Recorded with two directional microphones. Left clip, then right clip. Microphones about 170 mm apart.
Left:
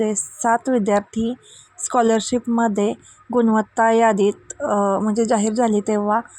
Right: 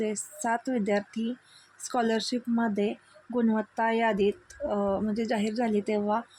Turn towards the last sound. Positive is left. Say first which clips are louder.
# left 8 dB
turn(degrees=30)  # may be behind; listen again after turning